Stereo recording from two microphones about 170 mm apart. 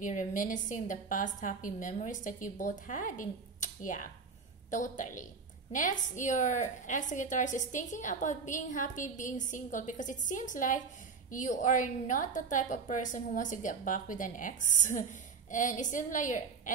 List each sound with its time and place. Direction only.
0.0 s a woman's voice: 50° left (ahead or behind)